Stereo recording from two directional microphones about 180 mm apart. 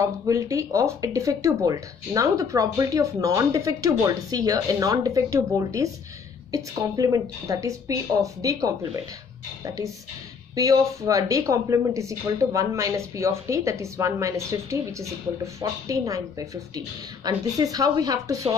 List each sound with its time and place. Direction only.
0.0 s speech: 15° right (ahead or behind)
10.5 s speech: 20° right (ahead or behind)